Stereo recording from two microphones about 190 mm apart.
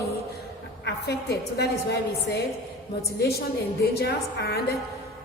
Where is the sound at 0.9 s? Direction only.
60° left (ahead or behind).